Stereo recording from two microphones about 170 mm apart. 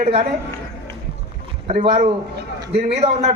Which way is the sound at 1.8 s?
40° right (ahead or behind).